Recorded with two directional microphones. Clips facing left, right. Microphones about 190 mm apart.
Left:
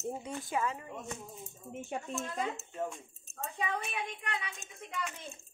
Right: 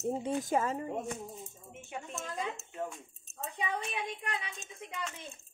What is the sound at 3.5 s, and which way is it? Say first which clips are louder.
A woman's voice: even; 25° right (ahead or behind).